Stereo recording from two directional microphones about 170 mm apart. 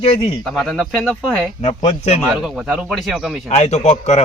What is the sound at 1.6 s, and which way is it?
Speech, 40° left (ahead or behind).